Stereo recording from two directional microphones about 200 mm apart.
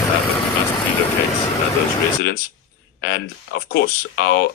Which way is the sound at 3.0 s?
55° left (ahead or behind).